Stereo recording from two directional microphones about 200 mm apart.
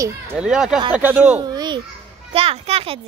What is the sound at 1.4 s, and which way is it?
A child's voice, 20° right (ahead or behind).